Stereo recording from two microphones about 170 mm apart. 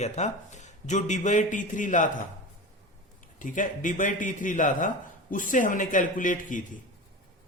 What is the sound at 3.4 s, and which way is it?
Speech, 50° left (ahead or behind).